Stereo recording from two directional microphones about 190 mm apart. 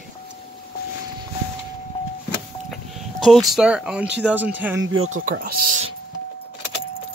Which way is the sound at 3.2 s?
Centre (ahead or behind).